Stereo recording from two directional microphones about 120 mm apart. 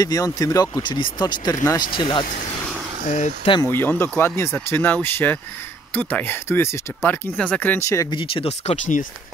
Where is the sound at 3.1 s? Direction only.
90° left.